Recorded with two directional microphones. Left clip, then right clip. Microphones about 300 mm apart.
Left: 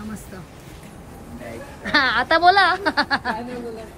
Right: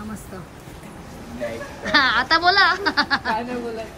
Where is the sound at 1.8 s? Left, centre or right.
Centre.